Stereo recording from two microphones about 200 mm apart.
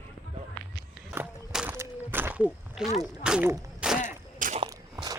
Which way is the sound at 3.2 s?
5° right (ahead or behind).